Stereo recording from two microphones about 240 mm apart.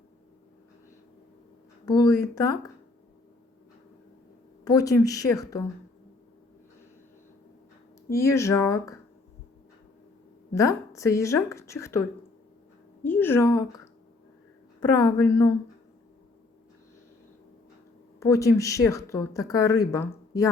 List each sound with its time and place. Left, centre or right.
1.8 s speech: centre
4.6 s speech: centre
8.1 s speech: centre
10.5 s speech: centre
14.9 s speech: centre
18.2 s speech: centre